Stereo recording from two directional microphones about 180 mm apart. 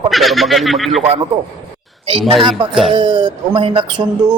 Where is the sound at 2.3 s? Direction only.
30° right (ahead or behind).